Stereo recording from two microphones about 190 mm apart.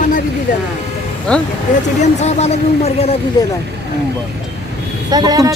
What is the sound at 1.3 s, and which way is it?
Speech, 5° left (ahead or behind).